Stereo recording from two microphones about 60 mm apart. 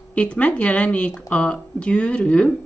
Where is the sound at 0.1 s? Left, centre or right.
Left.